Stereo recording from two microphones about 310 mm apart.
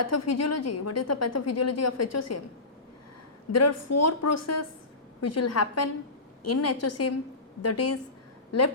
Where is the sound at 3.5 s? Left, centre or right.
Left.